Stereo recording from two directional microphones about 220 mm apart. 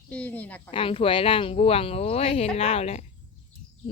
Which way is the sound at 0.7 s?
25° left (ahead or behind).